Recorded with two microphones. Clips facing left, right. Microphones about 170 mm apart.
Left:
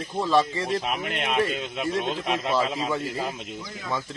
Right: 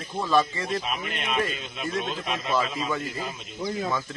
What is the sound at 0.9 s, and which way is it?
Speech, 70° left (ahead or behind).